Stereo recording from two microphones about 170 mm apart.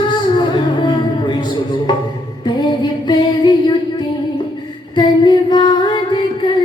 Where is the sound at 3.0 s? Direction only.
25° left (ahead or behind).